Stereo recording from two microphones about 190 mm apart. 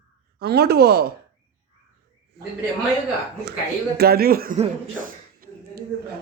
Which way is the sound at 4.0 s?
55° right (ahead or behind).